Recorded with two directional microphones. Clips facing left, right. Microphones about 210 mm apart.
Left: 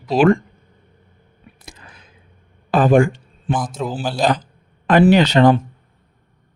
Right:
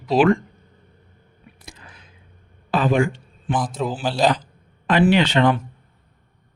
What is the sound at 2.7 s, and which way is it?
Speech, 50° left (ahead or behind).